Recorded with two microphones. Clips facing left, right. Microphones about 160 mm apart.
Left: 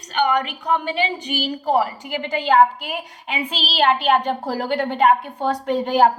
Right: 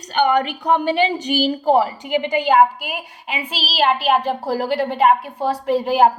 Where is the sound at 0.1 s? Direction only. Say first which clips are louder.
Right 3 dB; 30° right (ahead or behind).